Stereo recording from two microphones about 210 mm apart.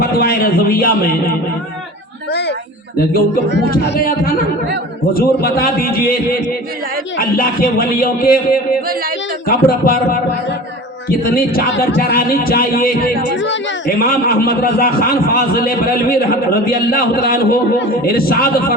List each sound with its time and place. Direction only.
0.0 s a man's voice: 45° left (ahead or behind)
9.5 s a man's voice: 45° left (ahead or behind)
11.3 s a man's voice: 45° left (ahead or behind)
13.3 s speech: 60° left (ahead or behind)
14.0 s a man's voice: 45° left (ahead or behind)